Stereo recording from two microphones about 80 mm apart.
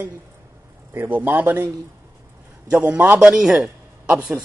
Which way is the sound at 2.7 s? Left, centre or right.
Centre.